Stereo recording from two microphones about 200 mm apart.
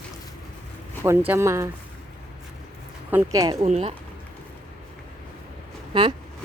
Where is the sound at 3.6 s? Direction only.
35° right (ahead or behind).